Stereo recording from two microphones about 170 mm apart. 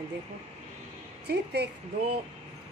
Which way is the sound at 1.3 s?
75° right (ahead or behind).